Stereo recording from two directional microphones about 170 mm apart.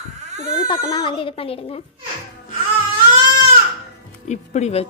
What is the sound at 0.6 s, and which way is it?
A child's voice, 25° left (ahead or behind).